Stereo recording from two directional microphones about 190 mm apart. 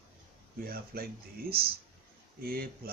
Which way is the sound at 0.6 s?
50° right (ahead or behind).